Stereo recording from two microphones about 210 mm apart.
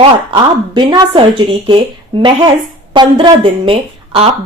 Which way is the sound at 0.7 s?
20° right (ahead or behind).